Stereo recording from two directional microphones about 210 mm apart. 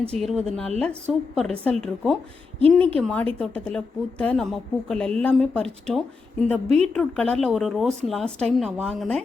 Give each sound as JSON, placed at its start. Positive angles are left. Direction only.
{"t": 0.2, "sound": "a woman's voice", "side_deg": 0}
{"t": 6.7, "sound": "a woman's voice", "side_deg": -30}
{"t": 6.9, "sound": "a woman's voice", "side_deg": 5}